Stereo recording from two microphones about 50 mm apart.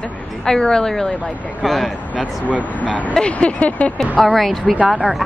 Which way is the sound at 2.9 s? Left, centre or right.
Left.